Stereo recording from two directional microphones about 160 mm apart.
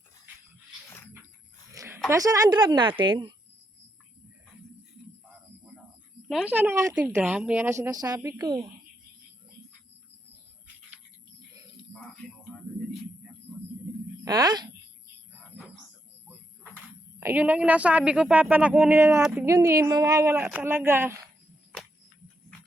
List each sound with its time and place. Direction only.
1.7 s a sound: 20° right (ahead or behind)
2.0 s speech: 20° right (ahead or behind)
6.2 s a woman's voice: 5° right (ahead or behind); by 8.7 s 30° right (ahead or behind)
14.3 s speech: 25° right (ahead or behind)
17.2 s a woman's voice: 10° right (ahead or behind)